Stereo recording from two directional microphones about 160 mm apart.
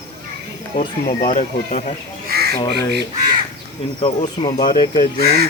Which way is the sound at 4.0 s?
35° left (ahead or behind).